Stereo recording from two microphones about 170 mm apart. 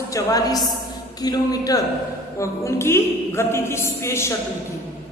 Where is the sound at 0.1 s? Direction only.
20° left (ahead or behind).